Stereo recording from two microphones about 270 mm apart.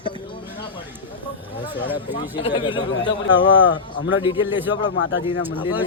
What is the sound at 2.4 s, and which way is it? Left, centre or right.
Speech, centre.